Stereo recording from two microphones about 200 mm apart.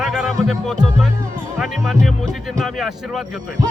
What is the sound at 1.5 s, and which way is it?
Speech, centre (ahead or behind).